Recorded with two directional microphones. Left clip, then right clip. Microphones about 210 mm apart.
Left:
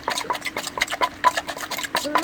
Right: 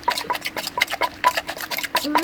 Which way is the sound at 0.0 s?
5° right (ahead or behind).